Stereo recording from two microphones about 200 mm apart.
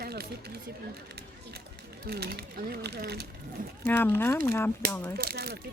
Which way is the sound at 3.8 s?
10° left (ahead or behind).